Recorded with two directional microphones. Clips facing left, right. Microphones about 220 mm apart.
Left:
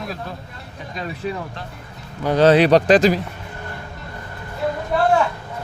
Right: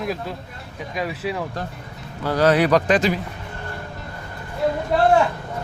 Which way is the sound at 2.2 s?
25° left (ahead or behind).